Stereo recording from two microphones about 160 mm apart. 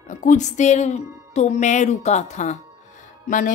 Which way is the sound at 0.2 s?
50° left (ahead or behind).